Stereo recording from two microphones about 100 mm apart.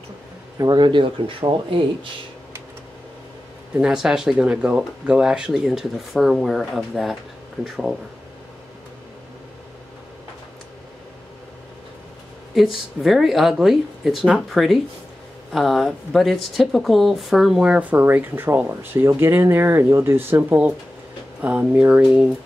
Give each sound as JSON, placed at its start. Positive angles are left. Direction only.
{"t": 0.6, "sound": "speech", "side_deg": -50}
{"t": 3.7, "sound": "speech", "side_deg": -5}
{"t": 12.5, "sound": "a woman's voice", "side_deg": 0}